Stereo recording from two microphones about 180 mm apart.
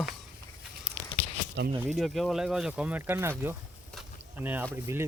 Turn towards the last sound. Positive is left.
turn(degrees=-15)  # may be behind; listen again after turning